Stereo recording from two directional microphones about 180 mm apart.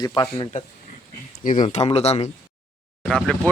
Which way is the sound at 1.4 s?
45° left (ahead or behind).